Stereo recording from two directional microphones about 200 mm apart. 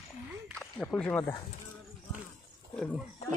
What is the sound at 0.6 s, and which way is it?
Speech, 5° left (ahead or behind).